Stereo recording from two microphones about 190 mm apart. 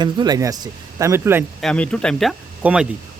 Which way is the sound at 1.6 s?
5° left (ahead or behind).